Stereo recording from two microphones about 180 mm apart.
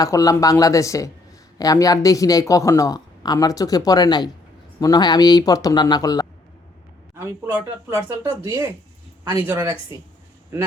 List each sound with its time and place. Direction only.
0.0 s speech: 20° left (ahead or behind)
7.2 s speech: 15° right (ahead or behind)